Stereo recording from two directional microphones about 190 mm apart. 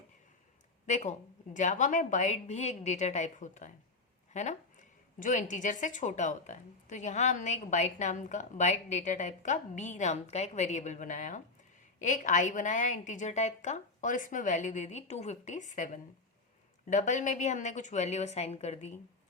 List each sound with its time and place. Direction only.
0.9 s a woman's voice: 40° left (ahead or behind)